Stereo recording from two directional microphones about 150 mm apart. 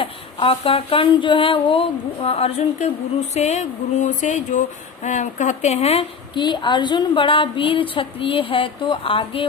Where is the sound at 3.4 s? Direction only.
50° left (ahead or behind).